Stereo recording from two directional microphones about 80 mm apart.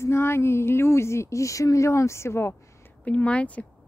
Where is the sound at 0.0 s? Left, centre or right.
Left.